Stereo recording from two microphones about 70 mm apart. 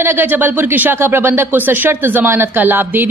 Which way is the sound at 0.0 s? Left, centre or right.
Right.